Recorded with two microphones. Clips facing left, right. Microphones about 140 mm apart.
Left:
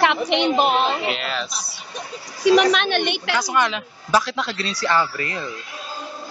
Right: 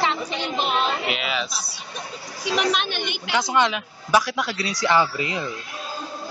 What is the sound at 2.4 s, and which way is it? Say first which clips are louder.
Speech: left 9 dB; 55° left (ahead or behind).